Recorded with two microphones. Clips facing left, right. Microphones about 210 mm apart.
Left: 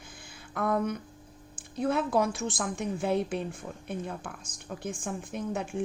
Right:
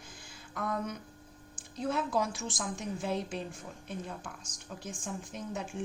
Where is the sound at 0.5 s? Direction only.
60° left (ahead or behind).